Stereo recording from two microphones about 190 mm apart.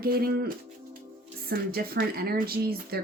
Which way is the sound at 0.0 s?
50° right (ahead or behind).